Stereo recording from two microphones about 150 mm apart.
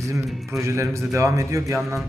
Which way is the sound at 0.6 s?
20° right (ahead or behind).